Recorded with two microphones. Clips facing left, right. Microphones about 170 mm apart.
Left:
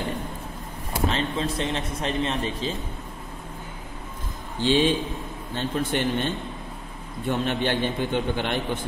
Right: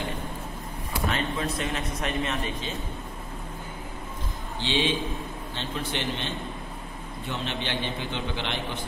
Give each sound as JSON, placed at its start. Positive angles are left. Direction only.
{"t": 1.0, "sound": "speech", "side_deg": 30}
{"t": 4.6, "sound": "a man's voice", "side_deg": 45}